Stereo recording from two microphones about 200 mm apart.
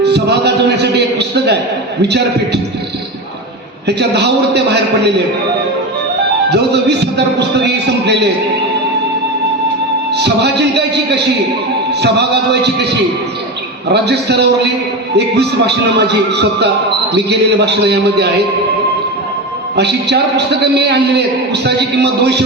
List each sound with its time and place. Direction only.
0.0 s a sound: 55° right (ahead or behind)
2.0 s a man's voice: 55° right (ahead or behind)
3.8 s a man's voice: 60° right (ahead or behind)
6.5 s a man's voice: 55° right (ahead or behind)
10.1 s a man's voice: 55° right (ahead or behind)
19.7 s a man's voice: 55° right (ahead or behind)